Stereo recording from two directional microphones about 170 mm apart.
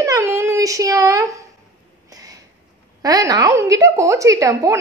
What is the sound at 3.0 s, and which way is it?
A woman's voice, 20° right (ahead or behind).